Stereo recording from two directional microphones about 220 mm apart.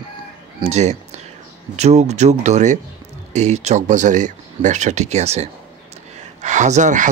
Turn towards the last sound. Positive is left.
turn(degrees=-35)  # may be behind; listen again after turning